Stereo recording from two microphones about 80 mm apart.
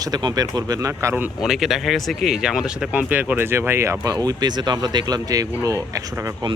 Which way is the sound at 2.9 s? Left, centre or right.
Centre.